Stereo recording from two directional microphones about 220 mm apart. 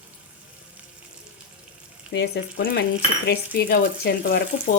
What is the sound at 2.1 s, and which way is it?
Speech, 55° left (ahead or behind).